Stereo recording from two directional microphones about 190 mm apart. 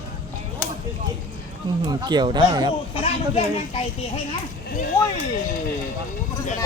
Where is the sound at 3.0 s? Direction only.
30° left (ahead or behind).